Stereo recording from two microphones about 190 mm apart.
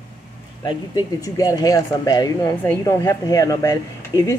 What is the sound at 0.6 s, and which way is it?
Speech, 20° left (ahead or behind).